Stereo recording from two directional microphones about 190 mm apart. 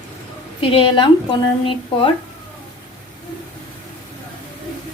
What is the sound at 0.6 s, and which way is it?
A woman's voice, 30° left (ahead or behind).